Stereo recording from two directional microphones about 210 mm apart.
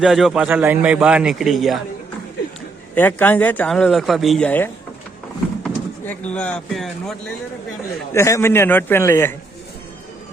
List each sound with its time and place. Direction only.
0.0 s a man's voice: centre (ahead or behind)
2.9 s speech: 10° left (ahead or behind)
8.1 s speech: 15° left (ahead or behind)